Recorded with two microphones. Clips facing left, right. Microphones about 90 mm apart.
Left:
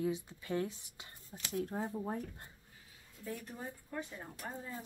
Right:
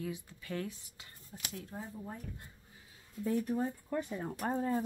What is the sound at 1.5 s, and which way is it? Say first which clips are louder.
Speech: left 8 dB; 45° left (ahead or behind).